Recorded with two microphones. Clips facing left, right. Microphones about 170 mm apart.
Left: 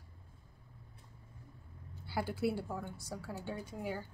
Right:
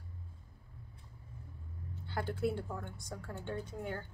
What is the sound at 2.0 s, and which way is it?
A woman's voice, 10° left (ahead or behind).